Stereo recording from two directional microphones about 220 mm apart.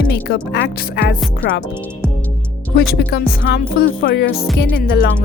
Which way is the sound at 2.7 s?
45° left (ahead or behind).